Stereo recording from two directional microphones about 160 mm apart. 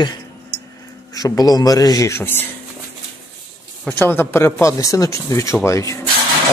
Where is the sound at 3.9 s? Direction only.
15° left (ahead or behind).